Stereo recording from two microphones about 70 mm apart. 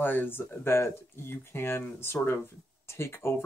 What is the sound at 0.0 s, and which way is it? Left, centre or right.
Speech, left.